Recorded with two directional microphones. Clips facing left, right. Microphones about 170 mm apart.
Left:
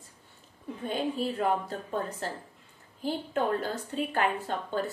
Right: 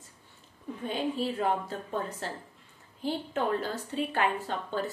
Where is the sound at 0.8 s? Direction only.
45° left (ahead or behind).